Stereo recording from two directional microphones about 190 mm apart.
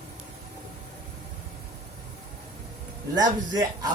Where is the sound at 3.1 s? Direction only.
20° right (ahead or behind).